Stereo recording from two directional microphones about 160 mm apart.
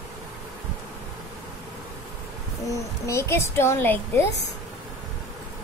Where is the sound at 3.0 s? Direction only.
15° left (ahead or behind).